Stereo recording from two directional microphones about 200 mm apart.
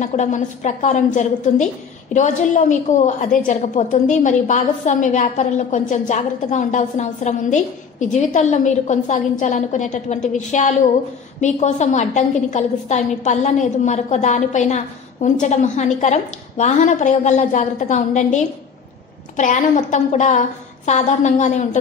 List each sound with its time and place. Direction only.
0.0 s a woman's voice: 35° left (ahead or behind)